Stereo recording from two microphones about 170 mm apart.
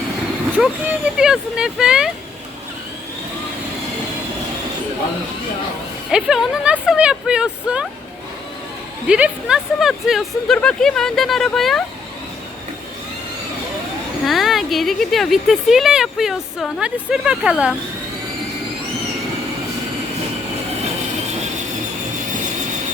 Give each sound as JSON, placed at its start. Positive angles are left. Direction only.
{"t": 0.5, "sound": "speech", "side_deg": -10}
{"t": 6.1, "sound": "speech", "side_deg": -5}
{"t": 9.0, "sound": "speech", "side_deg": -5}
{"t": 14.3, "sound": "speech", "side_deg": 0}